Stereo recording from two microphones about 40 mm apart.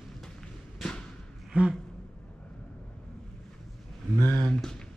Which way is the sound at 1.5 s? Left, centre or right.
Right.